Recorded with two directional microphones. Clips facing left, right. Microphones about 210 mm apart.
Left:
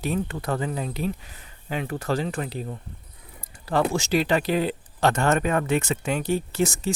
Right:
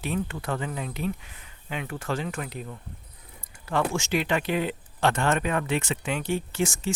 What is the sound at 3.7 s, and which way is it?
Speech, 35° left (ahead or behind).